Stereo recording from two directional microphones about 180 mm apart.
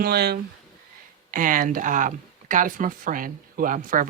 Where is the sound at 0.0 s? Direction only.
65° right (ahead or behind).